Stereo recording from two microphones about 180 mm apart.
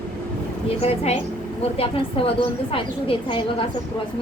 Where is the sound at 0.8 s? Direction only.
35° left (ahead or behind).